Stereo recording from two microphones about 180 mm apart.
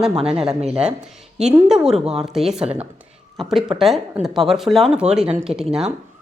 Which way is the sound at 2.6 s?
35° right (ahead or behind).